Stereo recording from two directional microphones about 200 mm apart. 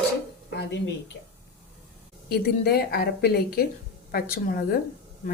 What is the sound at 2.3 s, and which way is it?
A woman's voice, 50° left (ahead or behind).